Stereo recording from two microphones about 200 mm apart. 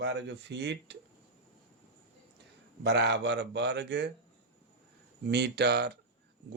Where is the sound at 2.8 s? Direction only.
60° right (ahead or behind).